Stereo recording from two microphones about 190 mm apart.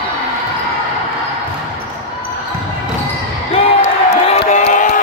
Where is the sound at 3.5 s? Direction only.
30° left (ahead or behind).